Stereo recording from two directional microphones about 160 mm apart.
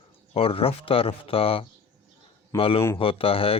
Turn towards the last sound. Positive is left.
turn(degrees=35)  # may be behind; listen again after turning